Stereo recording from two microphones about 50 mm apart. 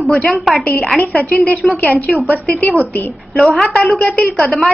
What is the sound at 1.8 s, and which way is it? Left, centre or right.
Speech, left.